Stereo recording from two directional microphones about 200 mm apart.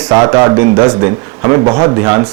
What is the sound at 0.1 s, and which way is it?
A man's voice, 15° right (ahead or behind).